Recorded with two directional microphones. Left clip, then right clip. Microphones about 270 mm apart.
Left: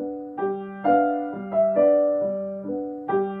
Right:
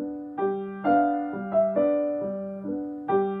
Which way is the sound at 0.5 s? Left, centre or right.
Left.